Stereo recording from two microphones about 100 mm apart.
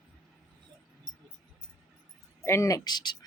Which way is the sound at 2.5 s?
30° left (ahead or behind).